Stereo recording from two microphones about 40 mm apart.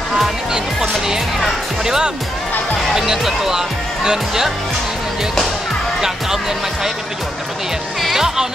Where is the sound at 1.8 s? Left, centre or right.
Centre.